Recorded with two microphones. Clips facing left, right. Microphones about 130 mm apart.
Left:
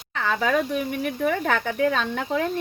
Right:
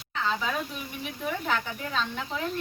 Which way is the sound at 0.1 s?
60° left (ahead or behind).